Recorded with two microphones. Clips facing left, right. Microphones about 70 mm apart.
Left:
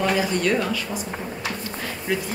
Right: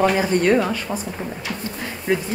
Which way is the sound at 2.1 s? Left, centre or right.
Right.